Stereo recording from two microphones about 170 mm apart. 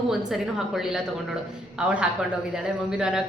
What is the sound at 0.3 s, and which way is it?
Speech, 5° right (ahead or behind).